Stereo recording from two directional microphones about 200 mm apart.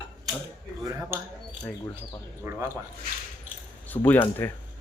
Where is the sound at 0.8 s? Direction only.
10° right (ahead or behind).